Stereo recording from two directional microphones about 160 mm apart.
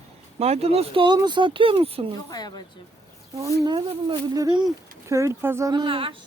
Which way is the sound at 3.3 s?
20° right (ahead or behind).